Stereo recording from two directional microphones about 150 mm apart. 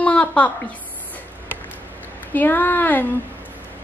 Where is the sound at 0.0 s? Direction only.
10° left (ahead or behind).